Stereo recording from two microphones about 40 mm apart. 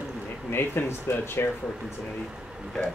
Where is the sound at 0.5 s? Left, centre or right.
Left.